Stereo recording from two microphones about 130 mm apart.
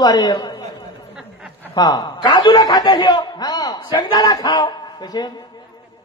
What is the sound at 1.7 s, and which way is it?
A man's voice, 30° left (ahead or behind).